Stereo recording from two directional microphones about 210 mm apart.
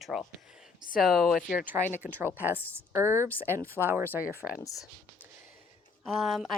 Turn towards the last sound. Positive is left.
turn(degrees=0)  # may be behind; listen again after turning